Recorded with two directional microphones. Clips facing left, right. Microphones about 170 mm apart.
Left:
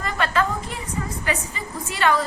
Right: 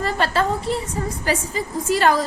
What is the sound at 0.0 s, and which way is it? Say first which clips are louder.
A woman's voice: right 2 dB; 35° right (ahead or behind).